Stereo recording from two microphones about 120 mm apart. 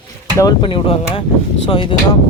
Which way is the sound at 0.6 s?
50° left (ahead or behind).